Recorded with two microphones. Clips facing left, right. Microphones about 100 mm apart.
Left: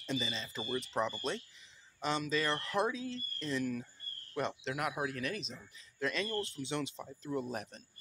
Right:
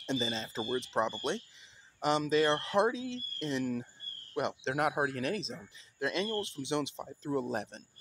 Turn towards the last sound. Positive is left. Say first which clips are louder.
# right 4 dB
turn(degrees=-30)  # may be behind; listen again after turning